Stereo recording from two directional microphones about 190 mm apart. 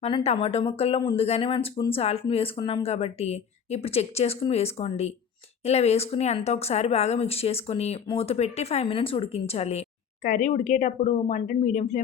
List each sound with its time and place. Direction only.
0.0 s speech: 30° left (ahead or behind)